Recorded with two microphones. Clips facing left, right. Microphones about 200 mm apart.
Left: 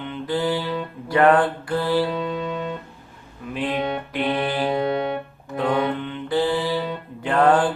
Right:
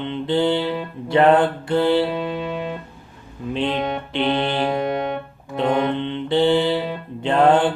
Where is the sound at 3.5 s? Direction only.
25° right (ahead or behind).